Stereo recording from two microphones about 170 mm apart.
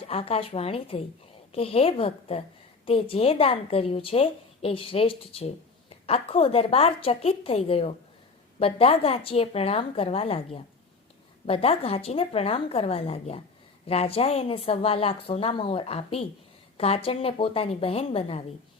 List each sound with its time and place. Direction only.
0.1 s a woman's voice: 35° left (ahead or behind)